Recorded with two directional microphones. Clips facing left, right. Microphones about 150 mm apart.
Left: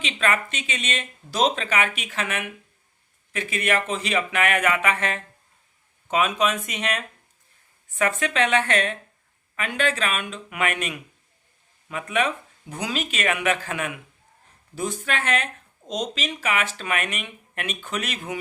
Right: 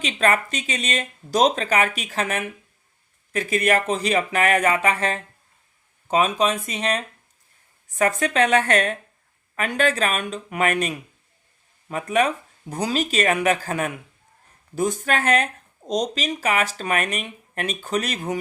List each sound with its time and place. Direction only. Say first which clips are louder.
0.0 s speech: right 4 dB; 40° right (ahead or behind)